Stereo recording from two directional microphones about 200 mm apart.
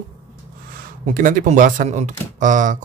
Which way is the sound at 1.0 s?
40° right (ahead or behind).